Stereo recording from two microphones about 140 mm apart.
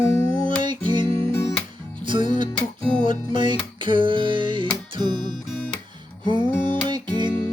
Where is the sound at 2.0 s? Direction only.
35° right (ahead or behind).